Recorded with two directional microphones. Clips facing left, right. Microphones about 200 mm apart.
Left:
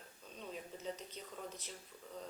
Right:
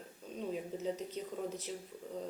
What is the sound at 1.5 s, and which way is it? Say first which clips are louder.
Speech: right 10 dB; 5° right (ahead or behind).